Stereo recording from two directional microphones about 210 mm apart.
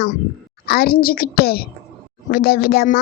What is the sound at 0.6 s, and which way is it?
A child's voice, 50° left (ahead or behind).